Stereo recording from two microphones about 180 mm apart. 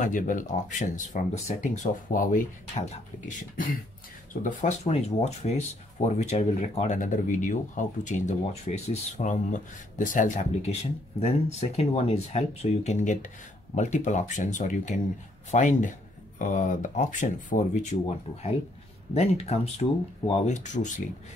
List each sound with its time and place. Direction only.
0.0 s speech: 45° left (ahead or behind)
4.3 s speech: 45° left (ahead or behind)
19.1 s speech: 35° left (ahead or behind)